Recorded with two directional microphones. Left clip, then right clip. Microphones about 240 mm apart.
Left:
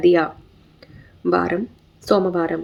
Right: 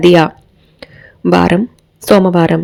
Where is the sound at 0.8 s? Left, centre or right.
Right.